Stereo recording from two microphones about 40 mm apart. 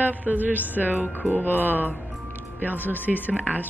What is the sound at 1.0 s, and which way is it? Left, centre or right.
Mantra, left.